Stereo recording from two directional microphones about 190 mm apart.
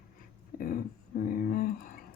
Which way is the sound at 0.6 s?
50° left (ahead or behind).